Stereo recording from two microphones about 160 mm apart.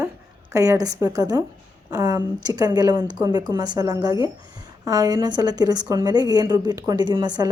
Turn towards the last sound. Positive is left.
turn(degrees=-25)  # may be behind; listen again after turning